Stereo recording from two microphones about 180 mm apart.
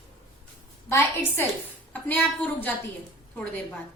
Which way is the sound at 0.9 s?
15° left (ahead or behind).